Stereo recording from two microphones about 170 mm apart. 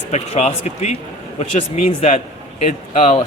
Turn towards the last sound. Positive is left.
turn(degrees=35)  # may be behind; listen again after turning